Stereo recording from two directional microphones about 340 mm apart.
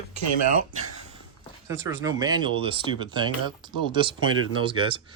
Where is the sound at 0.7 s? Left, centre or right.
Right.